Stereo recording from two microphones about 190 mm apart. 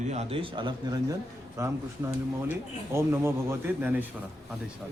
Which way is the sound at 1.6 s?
15° right (ahead or behind).